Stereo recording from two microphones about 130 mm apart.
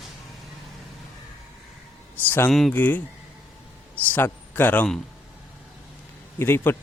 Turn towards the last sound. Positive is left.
turn(degrees=15)  # may be behind; listen again after turning